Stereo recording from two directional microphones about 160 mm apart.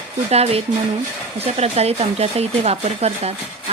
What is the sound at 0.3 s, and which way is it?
Speech, 40° right (ahead or behind).